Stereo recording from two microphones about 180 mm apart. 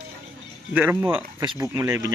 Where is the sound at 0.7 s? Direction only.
10° right (ahead or behind).